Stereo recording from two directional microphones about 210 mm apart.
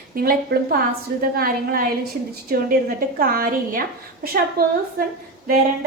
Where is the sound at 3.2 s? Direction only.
45° right (ahead or behind).